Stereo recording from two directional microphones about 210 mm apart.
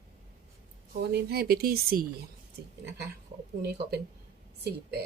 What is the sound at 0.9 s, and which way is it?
Speech, 50° right (ahead or behind).